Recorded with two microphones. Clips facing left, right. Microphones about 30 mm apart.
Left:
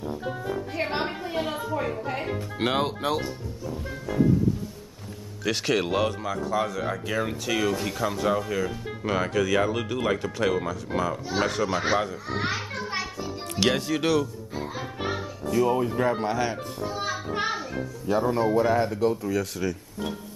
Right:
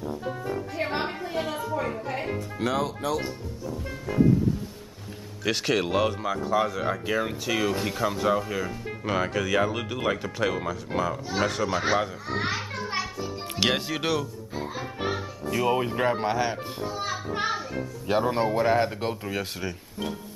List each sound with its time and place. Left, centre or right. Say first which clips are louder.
0.7 s music: left 1 dB; centre
1.4 s a woman's voice: even; centre
2.5 s speech: left 2 dB; left
5.4 s speech: even; centre
12.1 s music: even; centre
13.6 s music: left 2 dB; centre
15.6 s speech: even; right
16.1 s speech: even; right
16.8 s music: left 1 dB; centre
18.2 s speech: left 2 dB; right